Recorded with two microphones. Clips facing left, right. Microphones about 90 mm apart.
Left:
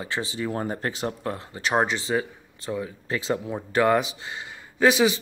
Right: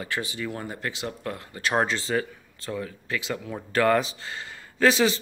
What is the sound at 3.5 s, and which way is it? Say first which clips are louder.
A man's voice: even; 15° left (ahead or behind).